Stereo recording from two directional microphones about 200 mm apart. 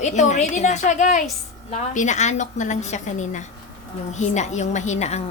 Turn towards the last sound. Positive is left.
turn(degrees=35)  # may be behind; listen again after turning